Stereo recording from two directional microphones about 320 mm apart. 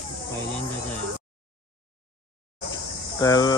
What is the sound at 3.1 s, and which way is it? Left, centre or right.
Speech, centre.